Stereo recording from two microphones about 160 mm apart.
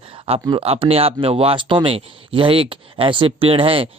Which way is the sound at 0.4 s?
35° right (ahead or behind).